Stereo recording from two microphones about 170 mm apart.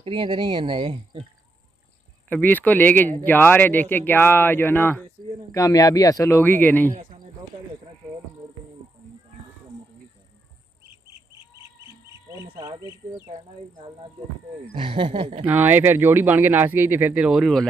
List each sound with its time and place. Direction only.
0.0 s speech: 30° right (ahead or behind)
2.2 s speech: 10° left (ahead or behind)
12.4 s speech: 25° right (ahead or behind)
14.8 s speech: 30° right (ahead or behind)
15.4 s speech: 10° right (ahead or behind)